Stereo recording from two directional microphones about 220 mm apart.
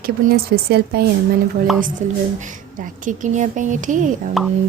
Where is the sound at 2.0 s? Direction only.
35° right (ahead or behind).